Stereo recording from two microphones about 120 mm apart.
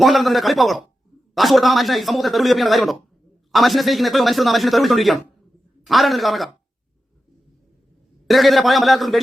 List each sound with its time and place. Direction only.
0.0 s speech: centre (ahead or behind)
8.3 s speech: centre (ahead or behind)